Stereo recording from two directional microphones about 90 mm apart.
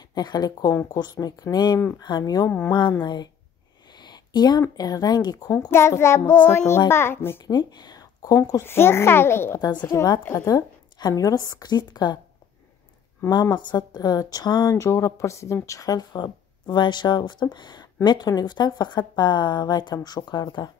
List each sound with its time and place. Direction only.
0.1 s speech: 50° left (ahead or behind)
5.7 s child singing: 30° left (ahead or behind)
7.4 s a child's voice: 50° left (ahead or behind); by 9.6 s 25° left (ahead or behind)
9.6 s speech: 50° left (ahead or behind)
10.3 s a child's voice: 35° left (ahead or behind)
13.3 s speech: 50° left (ahead or behind)
14.8 s speech: 35° left (ahead or behind); by 20.7 s 55° left (ahead or behind)